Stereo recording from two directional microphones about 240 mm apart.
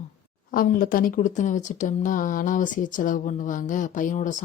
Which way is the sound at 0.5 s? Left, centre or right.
Left.